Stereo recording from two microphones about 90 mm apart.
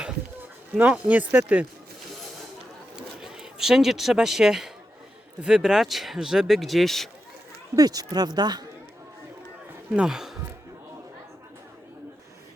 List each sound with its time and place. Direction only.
0.8 s speech: 15° right (ahead or behind)
2.9 s a sound: 5° right (ahead or behind)
5.4 s speech: 5° right (ahead or behind)
7.8 s speech: 45° right (ahead or behind)
9.9 s speech: 10° right (ahead or behind)